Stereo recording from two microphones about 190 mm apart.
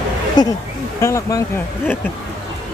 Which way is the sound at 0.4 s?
20° left (ahead or behind).